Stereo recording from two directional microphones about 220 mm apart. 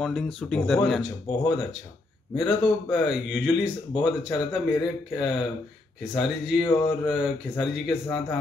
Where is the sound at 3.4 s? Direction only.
20° left (ahead or behind).